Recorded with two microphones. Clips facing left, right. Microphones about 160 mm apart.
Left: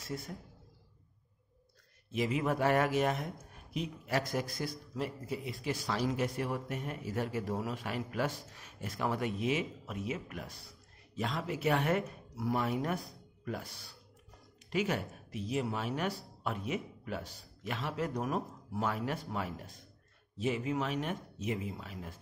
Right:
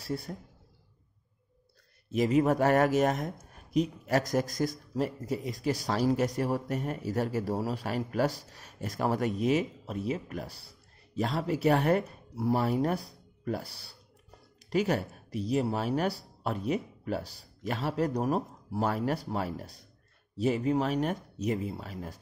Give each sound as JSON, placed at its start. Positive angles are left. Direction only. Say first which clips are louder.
{"t": 0.0, "sound": "a man's voice", "louder": "right 6 dB", "side_deg": -35}
{"t": 2.0, "sound": "speech", "louder": "right 7 dB", "side_deg": -40}